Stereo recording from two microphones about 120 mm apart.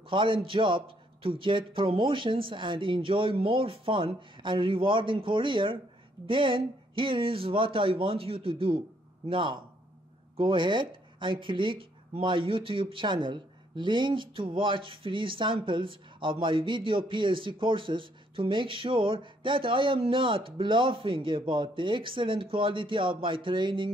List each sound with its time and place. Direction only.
0.1 s speech: 45° right (ahead or behind)